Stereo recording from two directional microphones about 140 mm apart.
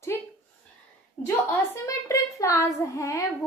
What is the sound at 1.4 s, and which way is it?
Speech, 20° left (ahead or behind).